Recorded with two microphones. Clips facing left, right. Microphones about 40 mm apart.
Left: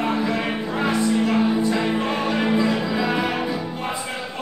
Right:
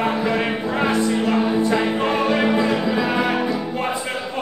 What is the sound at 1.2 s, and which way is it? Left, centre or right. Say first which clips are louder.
Music: right 1 dB; centre.